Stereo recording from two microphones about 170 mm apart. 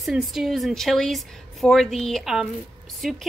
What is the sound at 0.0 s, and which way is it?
A woman's voice, centre (ahead or behind).